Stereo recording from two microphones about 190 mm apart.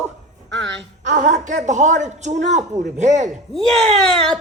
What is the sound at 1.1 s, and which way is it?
A woman's voice, 40° right (ahead or behind).